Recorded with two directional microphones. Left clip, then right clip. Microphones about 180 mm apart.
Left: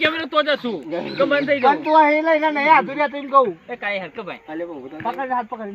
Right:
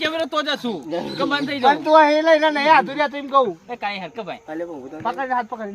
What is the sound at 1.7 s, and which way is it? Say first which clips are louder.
Speech: right 2 dB; 10° right (ahead or behind).